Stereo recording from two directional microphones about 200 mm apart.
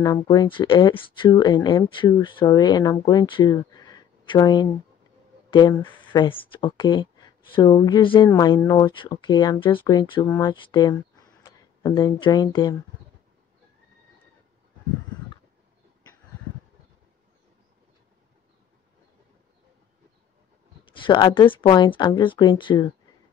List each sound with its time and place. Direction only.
0.0 s speech: 20° left (ahead or behind)
20.8 s speech: 25° left (ahead or behind)